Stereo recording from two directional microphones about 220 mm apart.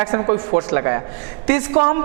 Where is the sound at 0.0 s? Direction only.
20° right (ahead or behind).